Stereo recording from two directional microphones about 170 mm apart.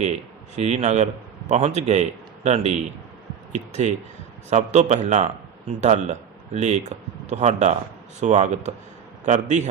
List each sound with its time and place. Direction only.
0.0 s a man's voice: 40° right (ahead or behind)
4.4 s a man's voice: 45° right (ahead or behind)